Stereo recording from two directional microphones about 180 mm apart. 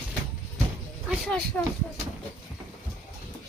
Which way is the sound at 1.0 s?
5° left (ahead or behind).